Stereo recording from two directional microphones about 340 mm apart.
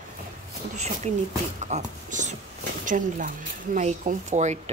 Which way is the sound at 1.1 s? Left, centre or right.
Centre.